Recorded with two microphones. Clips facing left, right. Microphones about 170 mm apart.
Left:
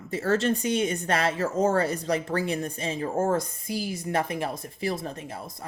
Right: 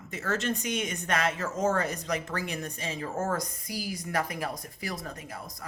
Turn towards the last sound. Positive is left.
turn(degrees=25)  # may be behind; listen again after turning